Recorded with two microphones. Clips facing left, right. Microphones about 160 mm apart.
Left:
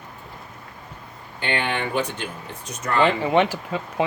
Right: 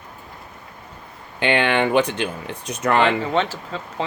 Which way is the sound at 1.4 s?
80° right.